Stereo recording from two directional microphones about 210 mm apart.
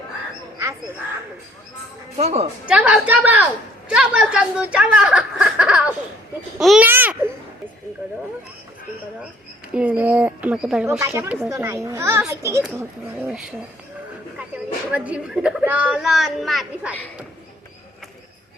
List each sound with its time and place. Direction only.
2.1 s a woman's voice: 30° right (ahead or behind)
2.6 s a woman's voice: 5° right (ahead or behind)
9.7 s speech: 5° right (ahead or behind)
14.8 s a woman's voice: 5° right (ahead or behind)